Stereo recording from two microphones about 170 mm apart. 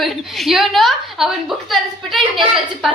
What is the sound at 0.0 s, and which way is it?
A woman's voice, centre (ahead or behind).